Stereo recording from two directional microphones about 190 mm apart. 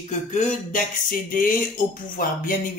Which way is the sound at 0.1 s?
40° left (ahead or behind).